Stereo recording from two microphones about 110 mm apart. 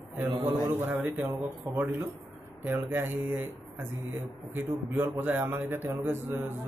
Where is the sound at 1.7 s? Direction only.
30° right (ahead or behind).